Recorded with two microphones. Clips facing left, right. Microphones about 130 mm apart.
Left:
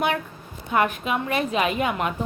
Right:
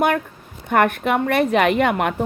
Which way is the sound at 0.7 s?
60° right (ahead or behind).